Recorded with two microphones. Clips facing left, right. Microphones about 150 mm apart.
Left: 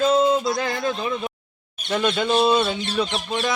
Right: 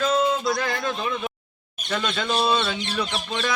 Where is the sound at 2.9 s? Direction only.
25° left (ahead or behind).